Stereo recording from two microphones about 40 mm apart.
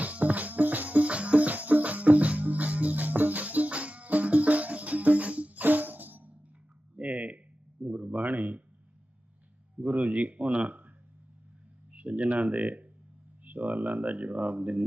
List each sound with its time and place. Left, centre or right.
0.0 s music: right
6.9 s a sound: right
9.8 s speech: right
11.9 s speech: right